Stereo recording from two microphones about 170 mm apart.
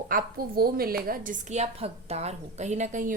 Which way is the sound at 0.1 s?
60° right (ahead or behind).